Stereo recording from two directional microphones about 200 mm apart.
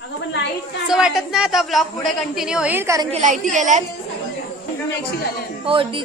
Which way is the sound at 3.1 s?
35° right (ahead or behind).